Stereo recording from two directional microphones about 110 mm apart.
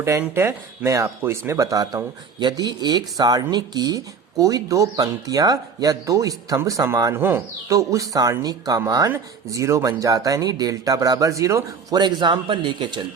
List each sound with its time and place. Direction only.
0.0 s speech: 25° right (ahead or behind)
7.2 s speech: 20° right (ahead or behind)
7.7 s speech: 30° right (ahead or behind)
9.0 s speech: 25° right (ahead or behind)
11.9 s speech: 45° right (ahead or behind)